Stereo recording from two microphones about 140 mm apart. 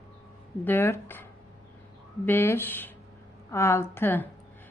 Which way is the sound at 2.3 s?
15° left (ahead or behind).